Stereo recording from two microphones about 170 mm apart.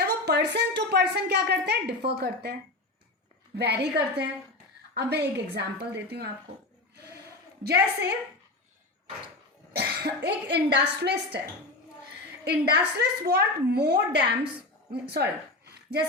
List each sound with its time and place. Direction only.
0.0 s a woman's voice: 75° right (ahead or behind)
9.7 s a woman's voice: 75° right (ahead or behind)
12.5 s a woman's voice: 70° right (ahead or behind)
15.1 s a sound: 75° right (ahead or behind)